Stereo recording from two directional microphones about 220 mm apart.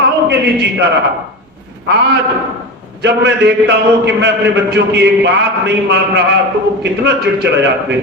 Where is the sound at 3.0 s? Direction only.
50° right (ahead or behind).